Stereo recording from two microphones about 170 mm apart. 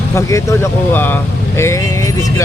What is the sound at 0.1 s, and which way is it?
Speech, 15° left (ahead or behind).